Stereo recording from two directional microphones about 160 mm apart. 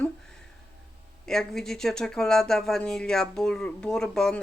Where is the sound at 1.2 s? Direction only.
5° left (ahead or behind).